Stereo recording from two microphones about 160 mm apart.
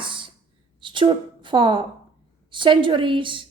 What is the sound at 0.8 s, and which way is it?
A woman's voice, 30° right (ahead or behind).